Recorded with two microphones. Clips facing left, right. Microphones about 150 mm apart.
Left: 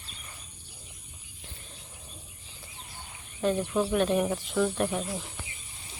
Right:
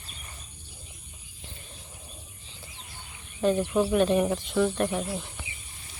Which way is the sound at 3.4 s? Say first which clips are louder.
Right 3 dB; 5° right (ahead or behind).